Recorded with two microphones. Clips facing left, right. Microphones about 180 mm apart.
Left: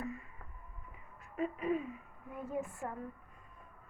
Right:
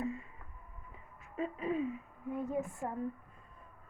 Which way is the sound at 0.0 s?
25° right (ahead or behind).